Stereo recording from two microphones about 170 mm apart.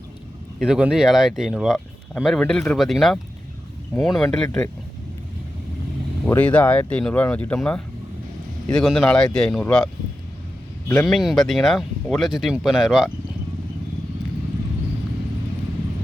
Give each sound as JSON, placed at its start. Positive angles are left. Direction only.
{"t": 0.6, "sound": "speech", "side_deg": -5}
{"t": 4.4, "sound": "speech", "side_deg": 15}
{"t": 6.2, "sound": "speech", "side_deg": 10}
{"t": 10.9, "sound": "speech", "side_deg": 0}